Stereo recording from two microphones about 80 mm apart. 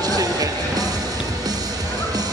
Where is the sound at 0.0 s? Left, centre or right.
Right.